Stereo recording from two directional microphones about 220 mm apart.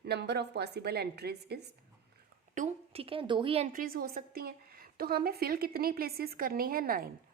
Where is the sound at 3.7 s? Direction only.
40° right (ahead or behind).